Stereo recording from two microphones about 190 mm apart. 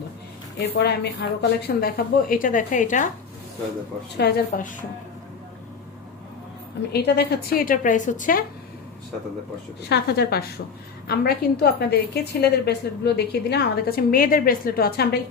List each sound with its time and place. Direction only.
0.8 s a woman's voice: 60° left (ahead or behind); by 3.1 s 40° left (ahead or behind)
4.2 s a woman's voice: 55° left (ahead or behind)
6.9 s a woman's voice: 60° left (ahead or behind); by 8.4 s 45° left (ahead or behind)
9.9 s a woman's voice: 60° left (ahead or behind)